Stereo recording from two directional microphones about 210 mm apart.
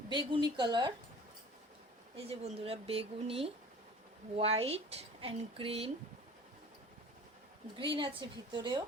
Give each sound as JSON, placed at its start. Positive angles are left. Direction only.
{"t": 0.1, "sound": "speech", "side_deg": -20}
{"t": 2.1, "sound": "speech", "side_deg": -30}
{"t": 7.8, "sound": "speech", "side_deg": -25}